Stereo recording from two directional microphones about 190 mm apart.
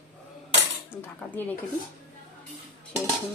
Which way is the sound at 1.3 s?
10° left (ahead or behind).